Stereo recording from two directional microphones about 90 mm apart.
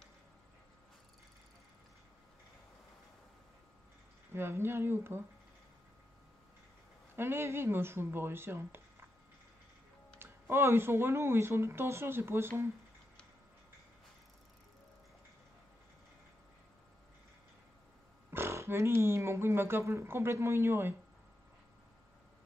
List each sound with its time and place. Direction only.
4.3 s speech: 25° right (ahead or behind)
7.2 s speech: 25° right (ahead or behind)
10.1 s speech: 25° right (ahead or behind)
18.3 s speech: 30° right (ahead or behind)